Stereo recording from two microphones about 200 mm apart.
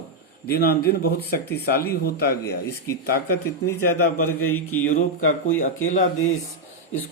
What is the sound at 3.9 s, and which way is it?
A man's voice, 90° left.